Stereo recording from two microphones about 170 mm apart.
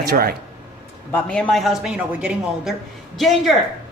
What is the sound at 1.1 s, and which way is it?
A woman's voice, 5° left (ahead or behind).